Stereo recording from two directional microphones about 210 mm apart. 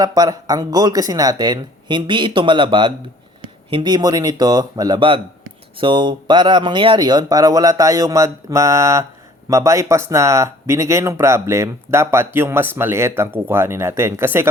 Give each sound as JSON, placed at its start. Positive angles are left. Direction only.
{"t": 0.0, "sound": "speech", "side_deg": -15}